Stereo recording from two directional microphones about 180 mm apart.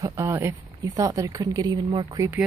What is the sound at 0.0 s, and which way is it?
Speech, 15° right (ahead or behind).